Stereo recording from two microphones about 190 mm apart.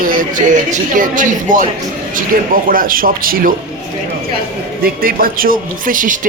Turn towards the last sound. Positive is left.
turn(degrees=-45)  # may be behind; listen again after turning